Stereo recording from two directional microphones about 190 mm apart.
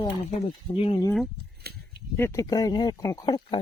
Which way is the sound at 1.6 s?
55° right (ahead or behind).